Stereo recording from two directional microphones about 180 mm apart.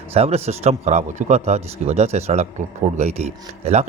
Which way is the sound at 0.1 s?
35° right (ahead or behind).